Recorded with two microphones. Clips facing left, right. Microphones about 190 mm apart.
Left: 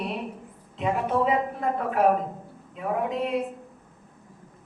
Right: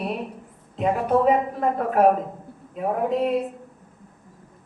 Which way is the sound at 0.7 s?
45° right (ahead or behind).